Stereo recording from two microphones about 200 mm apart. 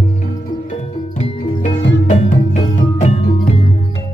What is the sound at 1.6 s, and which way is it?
Music, 25° left (ahead or behind).